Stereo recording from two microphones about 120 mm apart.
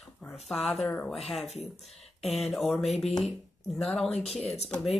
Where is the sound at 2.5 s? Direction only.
Centre (ahead or behind).